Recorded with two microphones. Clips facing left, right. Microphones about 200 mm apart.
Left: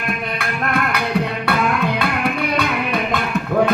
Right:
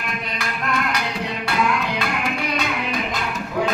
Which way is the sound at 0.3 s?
55° left (ahead or behind).